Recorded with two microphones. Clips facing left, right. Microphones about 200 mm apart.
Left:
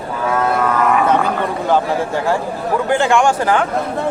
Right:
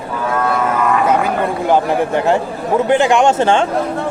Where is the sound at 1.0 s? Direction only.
10° right (ahead or behind); by 3.7 s 25° right (ahead or behind).